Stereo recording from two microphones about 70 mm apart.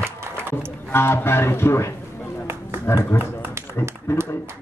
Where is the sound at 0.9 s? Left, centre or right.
Left.